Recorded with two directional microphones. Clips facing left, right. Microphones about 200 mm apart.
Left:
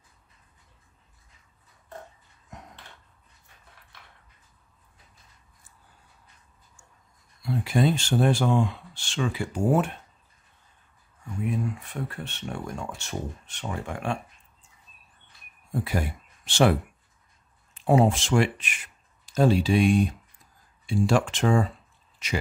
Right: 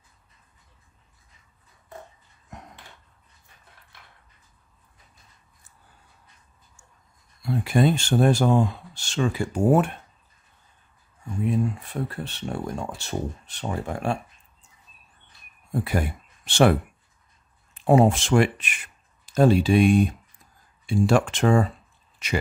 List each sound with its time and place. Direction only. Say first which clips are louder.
7.4 s speech: right 3 dB; 55° right (ahead or behind)
11.4 s speech: right 5 dB; 35° right (ahead or behind)
15.7 s speech: right 3 dB; 55° right (ahead or behind)
17.7 s speech: right 3 dB; 55° right (ahead or behind)